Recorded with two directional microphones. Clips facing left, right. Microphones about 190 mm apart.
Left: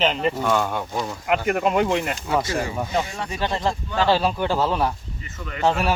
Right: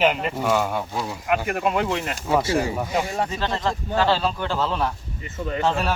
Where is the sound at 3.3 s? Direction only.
15° left (ahead or behind).